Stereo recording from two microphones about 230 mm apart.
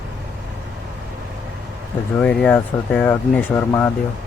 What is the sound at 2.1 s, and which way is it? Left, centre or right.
Speech, centre.